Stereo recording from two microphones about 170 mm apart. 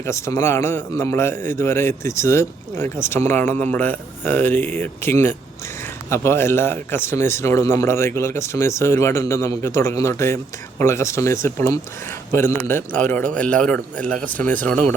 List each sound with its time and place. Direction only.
0.0 s a man's voice: 15° left (ahead or behind)